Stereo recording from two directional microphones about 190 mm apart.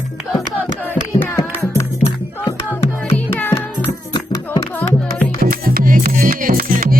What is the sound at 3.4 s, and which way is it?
Music, 10° left (ahead or behind).